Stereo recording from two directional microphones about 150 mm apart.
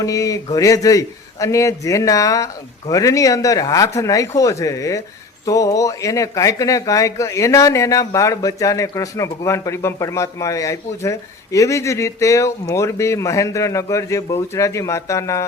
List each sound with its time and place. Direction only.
0.0 s speech: 25° left (ahead or behind)